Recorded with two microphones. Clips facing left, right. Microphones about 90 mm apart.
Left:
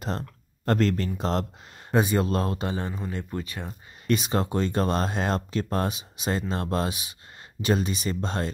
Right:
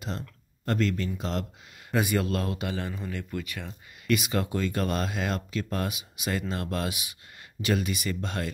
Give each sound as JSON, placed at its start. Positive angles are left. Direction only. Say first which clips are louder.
{"t": 0.0, "sound": "speech", "louder": "left 4 dB", "side_deg": 40}
{"t": 1.9, "sound": "speech", "louder": "left 3 dB", "side_deg": 25}